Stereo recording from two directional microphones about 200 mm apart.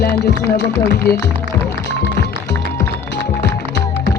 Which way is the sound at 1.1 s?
50° left (ahead or behind).